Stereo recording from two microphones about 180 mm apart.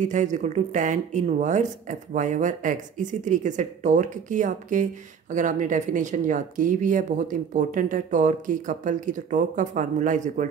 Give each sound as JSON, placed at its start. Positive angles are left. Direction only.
{"t": 0.0, "sound": "speech", "side_deg": -45}